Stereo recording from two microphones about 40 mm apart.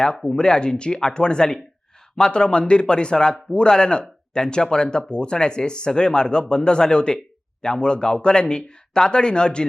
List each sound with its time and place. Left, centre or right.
0.3 s speech: left